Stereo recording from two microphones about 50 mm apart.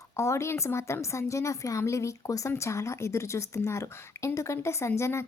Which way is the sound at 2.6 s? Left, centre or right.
Left.